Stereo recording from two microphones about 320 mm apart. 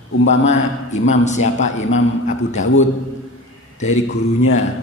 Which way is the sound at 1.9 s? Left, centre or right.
Left.